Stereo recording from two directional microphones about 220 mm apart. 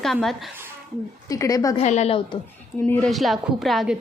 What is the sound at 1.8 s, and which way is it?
Speech, 30° left (ahead or behind).